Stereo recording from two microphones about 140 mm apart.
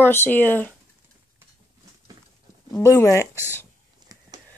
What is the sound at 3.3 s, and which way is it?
Speech, 15° right (ahead or behind).